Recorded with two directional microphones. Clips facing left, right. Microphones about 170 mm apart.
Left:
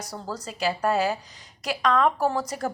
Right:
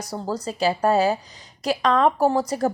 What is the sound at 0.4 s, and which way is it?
A woman's voice, 30° right (ahead or behind).